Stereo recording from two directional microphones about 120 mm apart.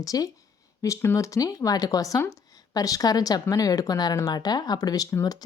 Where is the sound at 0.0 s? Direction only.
30° left (ahead or behind).